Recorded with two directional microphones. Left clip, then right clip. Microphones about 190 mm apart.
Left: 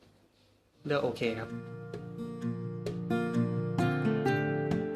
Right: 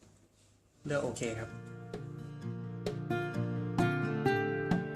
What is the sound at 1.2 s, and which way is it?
Speech, 20° left (ahead or behind).